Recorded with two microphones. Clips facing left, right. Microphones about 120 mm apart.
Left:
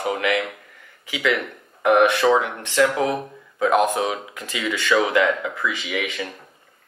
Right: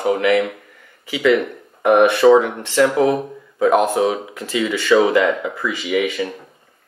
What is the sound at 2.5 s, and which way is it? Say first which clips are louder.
Speech: right 3 dB; 15° right (ahead or behind).